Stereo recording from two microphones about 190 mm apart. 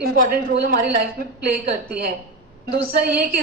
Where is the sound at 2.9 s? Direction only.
50° right (ahead or behind).